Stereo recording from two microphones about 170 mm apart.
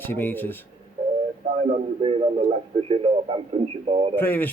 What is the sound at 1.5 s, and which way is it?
Speech, 35° right (ahead or behind).